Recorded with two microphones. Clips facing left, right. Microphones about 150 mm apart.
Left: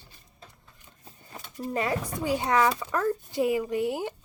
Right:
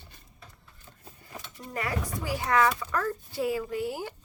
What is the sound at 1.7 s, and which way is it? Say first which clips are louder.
A woman's voice: left 3 dB; 25° left (ahead or behind).